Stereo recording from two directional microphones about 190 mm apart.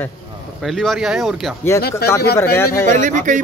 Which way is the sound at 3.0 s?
40° right (ahead or behind).